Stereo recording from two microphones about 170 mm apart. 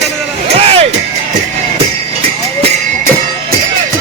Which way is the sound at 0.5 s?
35° right (ahead or behind).